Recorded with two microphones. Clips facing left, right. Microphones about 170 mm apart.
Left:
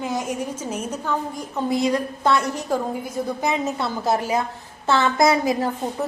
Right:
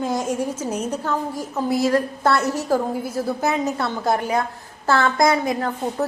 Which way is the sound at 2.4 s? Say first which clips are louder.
Right 3 dB; 5° right (ahead or behind).